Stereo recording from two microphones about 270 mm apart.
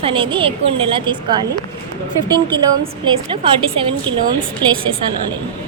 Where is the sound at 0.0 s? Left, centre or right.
Centre.